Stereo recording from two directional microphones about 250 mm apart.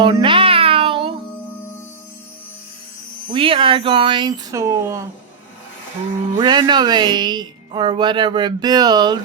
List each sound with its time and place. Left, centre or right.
0.0 s music: centre
3.3 s speech: right
6.3 s speech: centre